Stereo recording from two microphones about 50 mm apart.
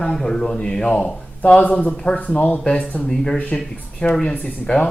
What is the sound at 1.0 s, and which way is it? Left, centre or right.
Speech, left.